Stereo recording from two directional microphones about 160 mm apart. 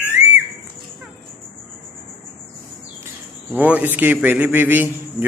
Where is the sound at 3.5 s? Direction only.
10° right (ahead or behind).